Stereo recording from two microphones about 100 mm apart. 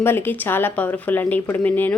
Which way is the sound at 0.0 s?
20° left (ahead or behind).